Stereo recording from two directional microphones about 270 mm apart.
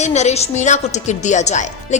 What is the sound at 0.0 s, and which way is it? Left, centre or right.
Speech, left.